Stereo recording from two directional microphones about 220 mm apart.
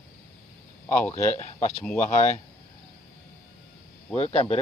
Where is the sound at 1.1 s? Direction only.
30° left (ahead or behind).